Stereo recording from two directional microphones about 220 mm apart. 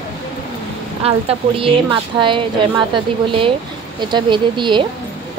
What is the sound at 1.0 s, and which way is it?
A woman's voice, 25° right (ahead or behind).